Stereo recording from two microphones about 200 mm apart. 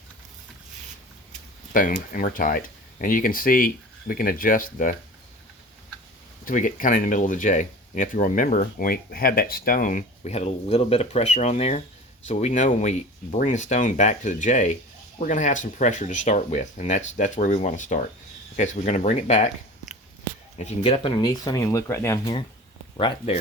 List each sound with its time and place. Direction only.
1.7 s speech: 40° left (ahead or behind)
6.4 s speech: 40° left (ahead or behind)
20.6 s speech: 30° left (ahead or behind)